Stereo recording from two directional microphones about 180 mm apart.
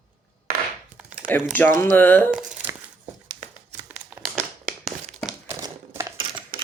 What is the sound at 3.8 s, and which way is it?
Crumpling, 10° right (ahead or behind).